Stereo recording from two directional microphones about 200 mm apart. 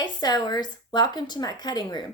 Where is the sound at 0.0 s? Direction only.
20° left (ahead or behind).